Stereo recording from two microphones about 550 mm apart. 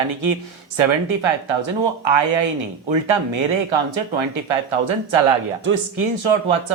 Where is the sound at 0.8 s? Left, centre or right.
Right.